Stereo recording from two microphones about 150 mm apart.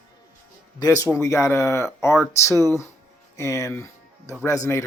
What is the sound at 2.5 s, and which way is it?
Speech, 25° right (ahead or behind).